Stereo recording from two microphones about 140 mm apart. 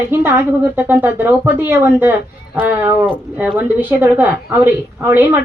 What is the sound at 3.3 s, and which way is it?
A woman's voice, 10° right (ahead or behind).